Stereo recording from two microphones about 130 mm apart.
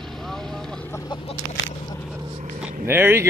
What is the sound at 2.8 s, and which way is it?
Vehicle, 15° right (ahead or behind).